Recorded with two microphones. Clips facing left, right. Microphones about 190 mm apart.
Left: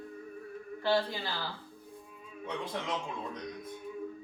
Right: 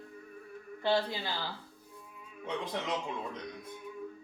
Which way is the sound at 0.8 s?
15° right (ahead or behind).